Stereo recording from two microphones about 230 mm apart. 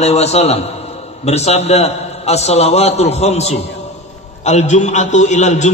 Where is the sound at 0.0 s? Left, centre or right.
Left.